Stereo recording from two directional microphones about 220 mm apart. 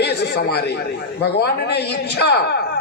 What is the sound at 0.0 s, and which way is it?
Speech, 50° left (ahead or behind).